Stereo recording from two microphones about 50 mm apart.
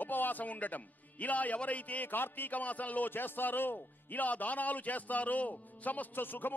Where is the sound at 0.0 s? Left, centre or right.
Left.